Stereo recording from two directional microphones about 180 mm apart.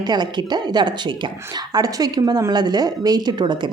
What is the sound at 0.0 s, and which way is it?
Speech, 25° right (ahead or behind).